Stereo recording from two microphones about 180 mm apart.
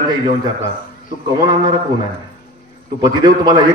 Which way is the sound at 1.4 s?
20° right (ahead or behind).